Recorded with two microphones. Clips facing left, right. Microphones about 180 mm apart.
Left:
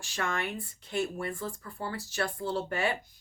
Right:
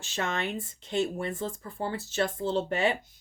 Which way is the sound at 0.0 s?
20° right (ahead or behind).